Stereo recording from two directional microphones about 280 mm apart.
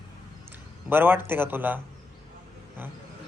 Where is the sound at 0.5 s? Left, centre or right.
Centre.